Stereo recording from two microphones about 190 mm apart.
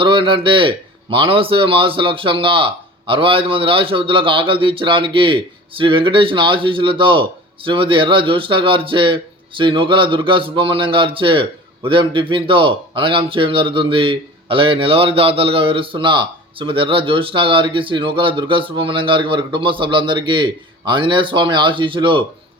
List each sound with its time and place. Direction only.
0.0 s speech: 25° right (ahead or behind)